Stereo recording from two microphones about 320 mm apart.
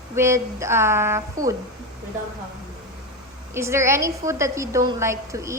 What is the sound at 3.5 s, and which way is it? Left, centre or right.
A woman's voice, centre.